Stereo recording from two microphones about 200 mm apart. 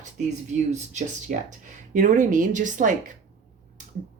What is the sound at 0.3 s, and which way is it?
Speech, 35° right (ahead or behind).